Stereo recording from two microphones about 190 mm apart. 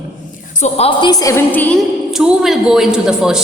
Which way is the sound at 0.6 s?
30° left (ahead or behind).